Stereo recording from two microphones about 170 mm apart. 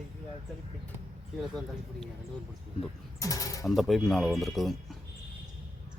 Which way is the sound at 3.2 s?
20° left (ahead or behind).